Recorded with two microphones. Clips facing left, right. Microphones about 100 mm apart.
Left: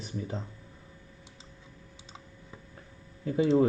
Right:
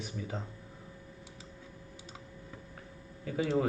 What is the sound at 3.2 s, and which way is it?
Speech, 25° left (ahead or behind).